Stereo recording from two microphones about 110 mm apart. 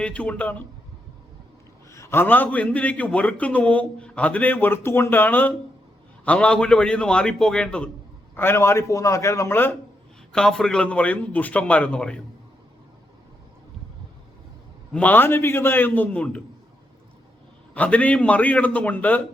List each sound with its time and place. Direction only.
0.0 s a man's voice: 10° left (ahead or behind)
1.9 s a man's voice: 25° left (ahead or behind); by 7.9 s 10° left (ahead or behind)
8.4 s a man's voice: 20° left (ahead or behind)
10.3 s a man's voice: 5° left (ahead or behind)
14.9 s a man's voice: 15° left (ahead or behind)
17.7 s a man's voice: 15° left (ahead or behind)